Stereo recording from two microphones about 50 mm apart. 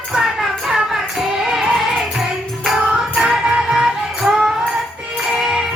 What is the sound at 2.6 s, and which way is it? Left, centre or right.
Music, centre.